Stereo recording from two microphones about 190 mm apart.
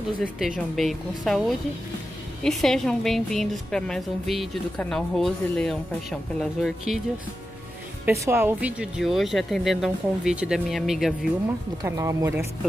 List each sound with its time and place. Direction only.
0.4 s a woman's voice: centre (ahead or behind)
2.4 s a woman's voice: centre (ahead or behind)
8.0 s a woman's voice: 15° right (ahead or behind)
11.8 s speech: 15° right (ahead or behind)